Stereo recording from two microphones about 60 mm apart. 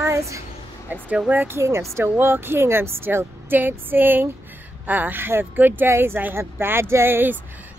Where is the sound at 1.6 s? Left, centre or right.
Right.